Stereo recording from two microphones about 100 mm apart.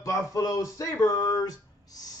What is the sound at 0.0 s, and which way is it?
Music, 35° left (ahead or behind).